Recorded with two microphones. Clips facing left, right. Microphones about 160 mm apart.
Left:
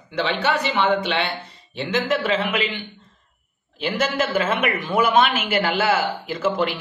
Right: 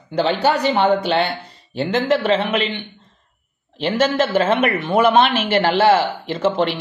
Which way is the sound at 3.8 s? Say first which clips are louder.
Right 5 dB; 30° right (ahead or behind).